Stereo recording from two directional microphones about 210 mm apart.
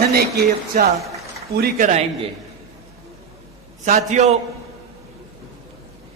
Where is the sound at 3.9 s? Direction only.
35° right (ahead or behind).